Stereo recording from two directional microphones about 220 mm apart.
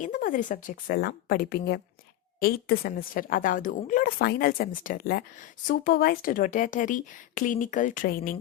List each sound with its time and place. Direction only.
0.0 s a woman's voice: 35° left (ahead or behind)